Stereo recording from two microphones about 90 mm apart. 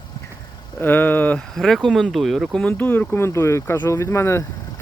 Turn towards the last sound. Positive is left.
turn(degrees=30)  # may be behind; listen again after turning